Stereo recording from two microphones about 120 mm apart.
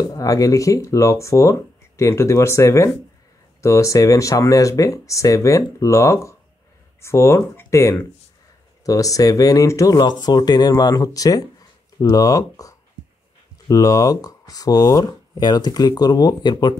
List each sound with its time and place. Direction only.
0.1 s speech: 30° left (ahead or behind)